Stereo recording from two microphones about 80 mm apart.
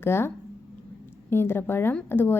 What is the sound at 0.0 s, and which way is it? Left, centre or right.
A woman's voice, left.